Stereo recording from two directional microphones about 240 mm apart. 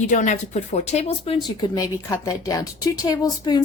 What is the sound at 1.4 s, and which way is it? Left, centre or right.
A woman's voice, centre.